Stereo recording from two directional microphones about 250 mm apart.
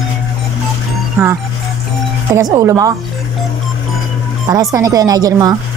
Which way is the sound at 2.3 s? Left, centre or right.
Centre.